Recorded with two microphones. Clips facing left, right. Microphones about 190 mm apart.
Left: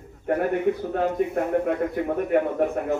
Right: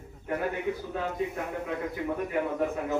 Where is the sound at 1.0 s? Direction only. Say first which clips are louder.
Left 8 dB; 60° left (ahead or behind).